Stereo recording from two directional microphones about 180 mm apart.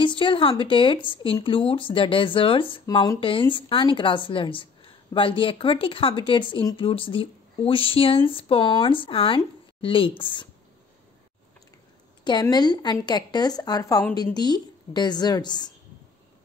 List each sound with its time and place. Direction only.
0.0 s speech: 30° left (ahead or behind)
12.3 s speech: 25° left (ahead or behind)